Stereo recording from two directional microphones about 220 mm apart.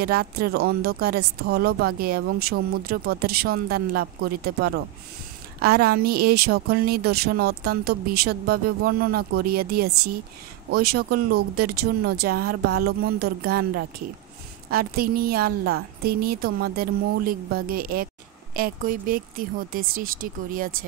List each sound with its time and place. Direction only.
0.0 s a woman's voice: 45° right (ahead or behind)